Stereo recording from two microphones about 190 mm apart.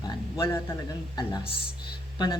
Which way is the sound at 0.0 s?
25° left (ahead or behind).